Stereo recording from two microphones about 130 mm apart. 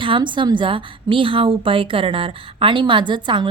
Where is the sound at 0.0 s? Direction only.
40° right (ahead or behind).